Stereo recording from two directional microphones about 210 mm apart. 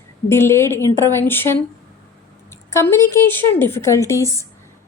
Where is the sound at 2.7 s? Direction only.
15° left (ahead or behind).